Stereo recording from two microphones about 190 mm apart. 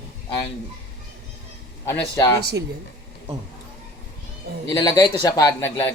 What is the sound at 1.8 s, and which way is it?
Speech, 15° left (ahead or behind).